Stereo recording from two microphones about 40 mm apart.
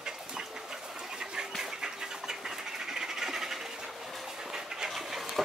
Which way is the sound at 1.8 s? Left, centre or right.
Centre.